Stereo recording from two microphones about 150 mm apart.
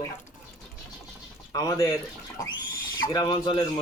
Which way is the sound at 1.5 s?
25° left (ahead or behind).